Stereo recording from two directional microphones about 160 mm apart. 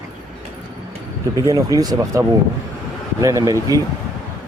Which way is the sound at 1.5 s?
20° right (ahead or behind).